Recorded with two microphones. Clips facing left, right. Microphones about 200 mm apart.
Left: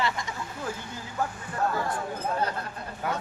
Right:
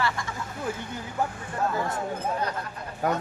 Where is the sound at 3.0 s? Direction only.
40° right (ahead or behind).